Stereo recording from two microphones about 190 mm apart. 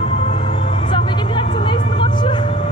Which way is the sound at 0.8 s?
25° left (ahead or behind).